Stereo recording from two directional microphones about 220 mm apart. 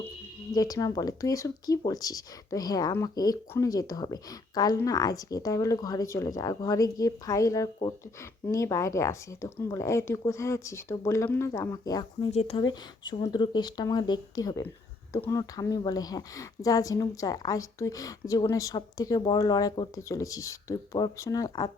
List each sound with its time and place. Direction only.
0.5 s speech: 15° left (ahead or behind)
12.3 s speech: 30° left (ahead or behind)